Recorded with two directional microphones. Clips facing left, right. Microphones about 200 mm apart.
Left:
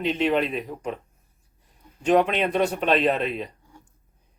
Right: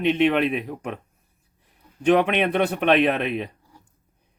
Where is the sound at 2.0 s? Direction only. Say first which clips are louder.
Right 2 dB; 60° right (ahead or behind).